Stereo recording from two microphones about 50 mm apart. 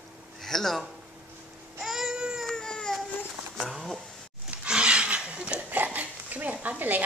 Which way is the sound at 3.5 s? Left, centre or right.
Centre.